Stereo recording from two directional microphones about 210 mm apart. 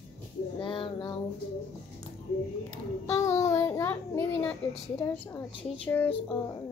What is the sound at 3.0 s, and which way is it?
A child's voice, 15° left (ahead or behind).